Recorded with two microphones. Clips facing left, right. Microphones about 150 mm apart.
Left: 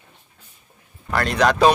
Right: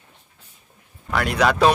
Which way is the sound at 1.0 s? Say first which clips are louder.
Left 1 dB; 5° right (ahead or behind).